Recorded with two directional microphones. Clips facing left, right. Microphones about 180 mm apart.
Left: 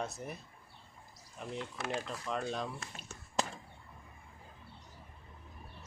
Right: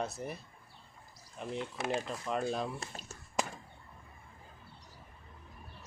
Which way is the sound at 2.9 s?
40° right (ahead or behind).